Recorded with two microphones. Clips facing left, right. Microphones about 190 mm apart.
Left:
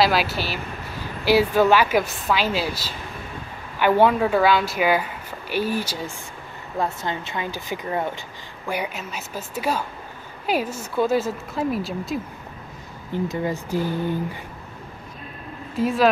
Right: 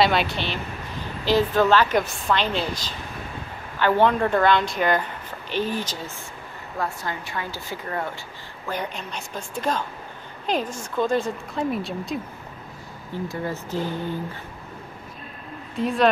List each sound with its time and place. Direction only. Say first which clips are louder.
0.0 s speech: left 1 dB; 5° left (ahead or behind)
6.8 s speech: left 3 dB; 20° left (ahead or behind); by 12.2 s centre (ahead or behind)
13.1 s speech: left 4 dB; 15° left (ahead or behind)
15.7 s a woman's voice: left 1 dB; centre (ahead or behind)